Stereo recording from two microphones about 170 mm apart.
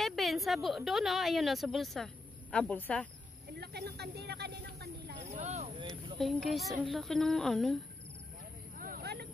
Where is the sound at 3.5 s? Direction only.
70° right (ahead or behind).